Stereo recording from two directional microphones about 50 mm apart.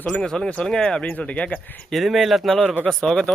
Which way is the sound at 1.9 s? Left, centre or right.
Centre.